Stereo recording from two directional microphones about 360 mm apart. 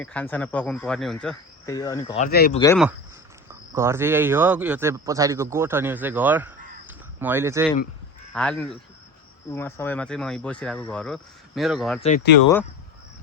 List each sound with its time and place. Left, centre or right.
0.0 s speech: centre
2.2 s speech: left
2.6 s speech: centre
3.5 s speech: centre
11.9 s speech: centre